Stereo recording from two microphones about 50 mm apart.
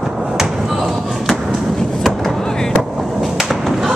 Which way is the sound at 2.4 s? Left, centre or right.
Centre.